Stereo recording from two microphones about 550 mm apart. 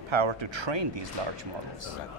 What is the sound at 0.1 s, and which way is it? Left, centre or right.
Speech, right.